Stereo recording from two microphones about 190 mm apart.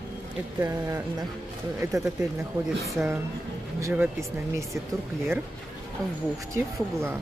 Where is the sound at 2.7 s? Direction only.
Centre (ahead or behind).